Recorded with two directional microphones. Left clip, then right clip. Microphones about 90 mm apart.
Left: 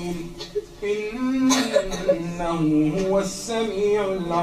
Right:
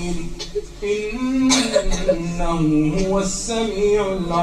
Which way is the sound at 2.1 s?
15° left (ahead or behind).